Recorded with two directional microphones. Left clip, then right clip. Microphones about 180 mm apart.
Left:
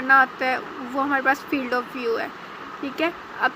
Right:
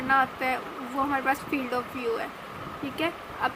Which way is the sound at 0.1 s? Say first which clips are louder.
Left 7 dB; 20° left (ahead or behind).